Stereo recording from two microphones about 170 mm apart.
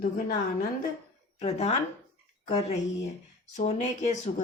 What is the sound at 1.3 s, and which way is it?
Speech, 40° left (ahead or behind).